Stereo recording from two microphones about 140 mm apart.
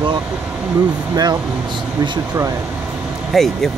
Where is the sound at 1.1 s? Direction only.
30° right (ahead or behind).